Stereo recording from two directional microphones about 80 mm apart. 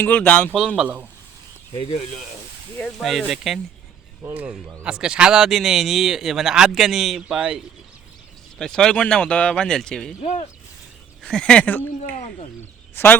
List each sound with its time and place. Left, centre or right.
0.0 s speech: centre
3.0 s speech: centre
4.8 s speech: centre
8.5 s speech: centre
11.2 s speech: centre
12.9 s a sound: left